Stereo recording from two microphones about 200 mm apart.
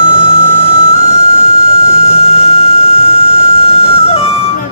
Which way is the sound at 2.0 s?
30° left (ahead or behind).